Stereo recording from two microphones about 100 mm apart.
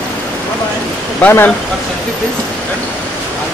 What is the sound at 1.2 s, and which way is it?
Speech, 20° left (ahead or behind).